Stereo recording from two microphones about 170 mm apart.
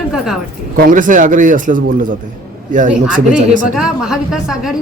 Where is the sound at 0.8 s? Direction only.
50° right (ahead or behind).